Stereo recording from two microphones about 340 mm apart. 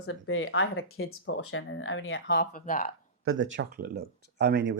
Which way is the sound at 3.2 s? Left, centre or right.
Right.